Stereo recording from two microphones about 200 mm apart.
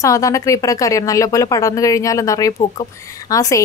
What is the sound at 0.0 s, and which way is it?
Speech, 15° left (ahead or behind).